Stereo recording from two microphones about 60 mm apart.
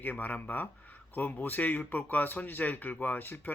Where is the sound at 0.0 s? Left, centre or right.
Left.